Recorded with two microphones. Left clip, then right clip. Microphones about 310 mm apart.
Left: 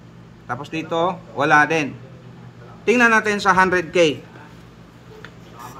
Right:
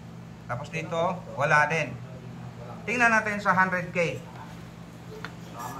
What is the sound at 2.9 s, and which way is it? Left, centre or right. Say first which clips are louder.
Speech: left 8 dB; left.